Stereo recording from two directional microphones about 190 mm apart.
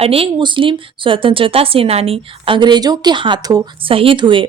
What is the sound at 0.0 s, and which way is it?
Speech, 30° right (ahead or behind).